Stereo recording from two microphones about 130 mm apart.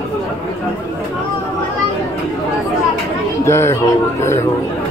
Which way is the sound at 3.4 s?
20° left (ahead or behind).